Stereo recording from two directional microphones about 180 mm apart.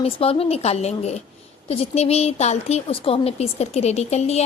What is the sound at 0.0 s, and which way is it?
A woman's voice, 35° left (ahead or behind).